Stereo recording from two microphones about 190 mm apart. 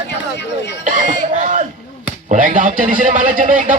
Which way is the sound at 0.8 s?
40° right (ahead or behind).